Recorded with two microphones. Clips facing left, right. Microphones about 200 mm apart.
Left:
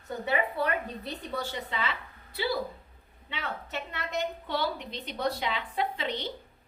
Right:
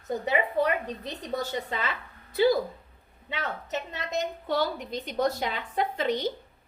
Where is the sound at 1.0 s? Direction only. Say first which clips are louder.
Right 3 dB; 45° right (ahead or behind).